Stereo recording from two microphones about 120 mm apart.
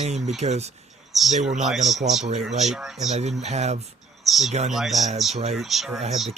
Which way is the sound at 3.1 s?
65° right (ahead or behind).